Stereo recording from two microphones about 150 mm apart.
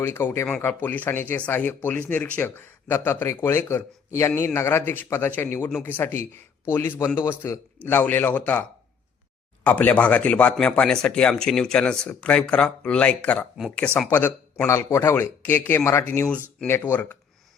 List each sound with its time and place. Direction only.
0.0 s speech: 15° left (ahead or behind)
9.6 s speech: 10° left (ahead or behind)